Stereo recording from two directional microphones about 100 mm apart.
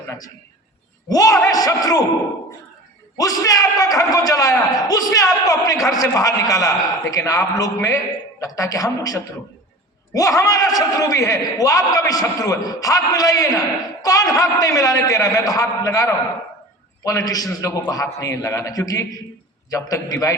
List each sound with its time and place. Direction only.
1.0 s a man's voice: 35° left (ahead or behind)
3.2 s a man's voice: 35° left (ahead or behind)